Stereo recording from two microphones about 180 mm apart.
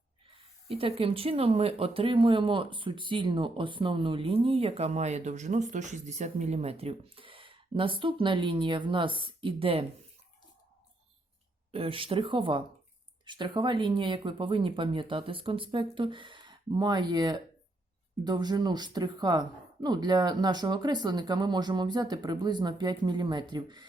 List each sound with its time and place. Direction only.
0.7 s speech: 35° right (ahead or behind)
11.7 s speech: 30° right (ahead or behind)